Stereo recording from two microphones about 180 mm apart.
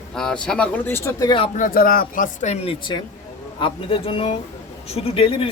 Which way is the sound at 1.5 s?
50° left (ahead or behind).